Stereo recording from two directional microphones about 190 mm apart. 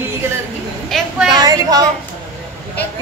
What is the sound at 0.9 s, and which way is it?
Speech, centre (ahead or behind).